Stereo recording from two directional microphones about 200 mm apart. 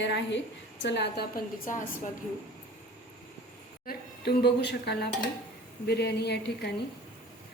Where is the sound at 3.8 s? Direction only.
50° left (ahead or behind).